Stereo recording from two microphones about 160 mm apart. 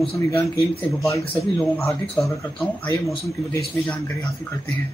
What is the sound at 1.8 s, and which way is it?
Speech, 20° left (ahead or behind).